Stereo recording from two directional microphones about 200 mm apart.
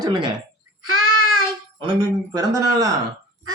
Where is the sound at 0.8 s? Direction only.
90° right.